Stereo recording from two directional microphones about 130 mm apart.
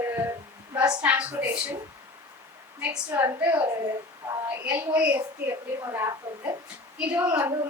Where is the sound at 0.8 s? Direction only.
10° right (ahead or behind).